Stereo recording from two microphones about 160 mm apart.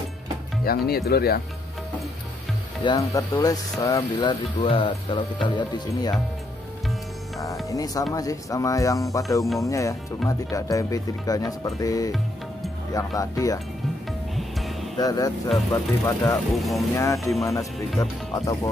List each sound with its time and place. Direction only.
0.7 s speech: 70° left (ahead or behind)
2.8 s speech: 25° left (ahead or behind)
7.7 s speech: 20° left (ahead or behind)
15.0 s speech: 25° left (ahead or behind)
16.5 s speech: centre (ahead or behind)
16.9 s speech: 20° left (ahead or behind)
17.2 s speech: centre (ahead or behind)
18.3 s speech: 20° left (ahead or behind)